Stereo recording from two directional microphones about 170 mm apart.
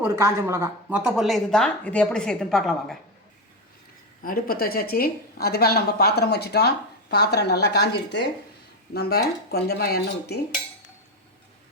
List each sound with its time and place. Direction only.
0.0 s a woman's voice: 15° right (ahead or behind); by 3.0 s centre (ahead or behind)
4.2 s a woman's voice: 55° left (ahead or behind); by 8.2 s 80° left
8.9 s a woman's voice: 65° left (ahead or behind)